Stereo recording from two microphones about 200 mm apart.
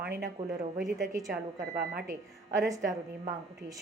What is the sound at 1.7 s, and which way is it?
Speech, 50° right (ahead or behind).